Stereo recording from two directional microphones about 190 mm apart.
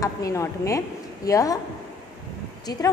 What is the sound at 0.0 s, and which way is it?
A woman's voice, 15° left (ahead or behind).